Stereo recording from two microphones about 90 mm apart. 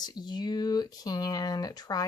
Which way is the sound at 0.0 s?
50° left (ahead or behind).